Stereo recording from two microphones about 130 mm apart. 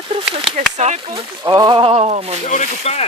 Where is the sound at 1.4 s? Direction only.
30° right (ahead or behind); by 2.4 s 50° right (ahead or behind).